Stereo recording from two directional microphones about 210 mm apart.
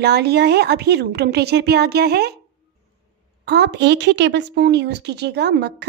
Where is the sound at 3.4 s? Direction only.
55° right (ahead or behind).